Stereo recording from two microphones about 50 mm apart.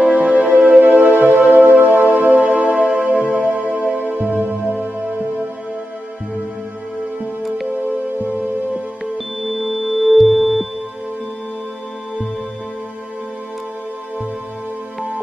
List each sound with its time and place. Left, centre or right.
0.4 s music: right
9.4 s music: centre